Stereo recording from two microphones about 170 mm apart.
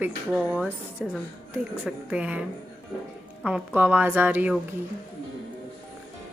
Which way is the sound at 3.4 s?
5° right (ahead or behind).